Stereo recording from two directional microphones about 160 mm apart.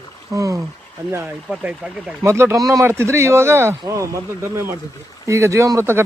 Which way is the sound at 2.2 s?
15° right (ahead or behind).